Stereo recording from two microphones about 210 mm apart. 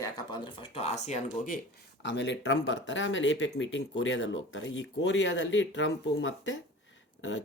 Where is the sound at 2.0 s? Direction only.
60° left (ahead or behind).